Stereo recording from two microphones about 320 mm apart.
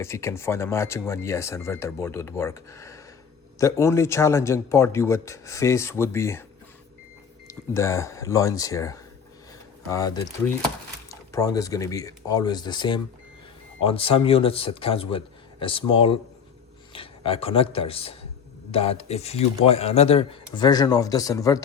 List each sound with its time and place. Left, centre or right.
0.0 s speech: centre
7.4 s speech: centre